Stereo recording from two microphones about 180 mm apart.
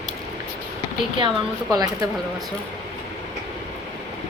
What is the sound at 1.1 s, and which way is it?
Speech, 25° right (ahead or behind).